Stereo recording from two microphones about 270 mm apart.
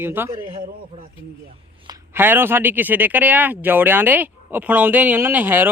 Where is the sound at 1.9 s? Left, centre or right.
Centre.